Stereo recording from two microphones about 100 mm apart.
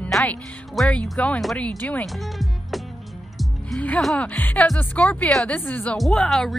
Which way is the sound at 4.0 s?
5° left (ahead or behind).